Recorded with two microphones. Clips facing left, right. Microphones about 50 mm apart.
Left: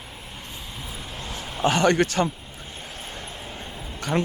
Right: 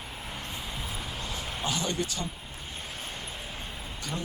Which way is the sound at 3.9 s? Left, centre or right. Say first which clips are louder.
Left 12 dB; left.